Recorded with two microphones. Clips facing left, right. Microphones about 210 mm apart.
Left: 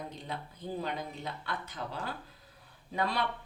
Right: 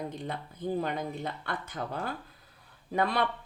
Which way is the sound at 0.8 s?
55° right (ahead or behind).